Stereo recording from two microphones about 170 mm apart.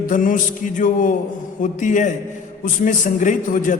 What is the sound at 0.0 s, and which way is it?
Mantra, 50° left (ahead or behind).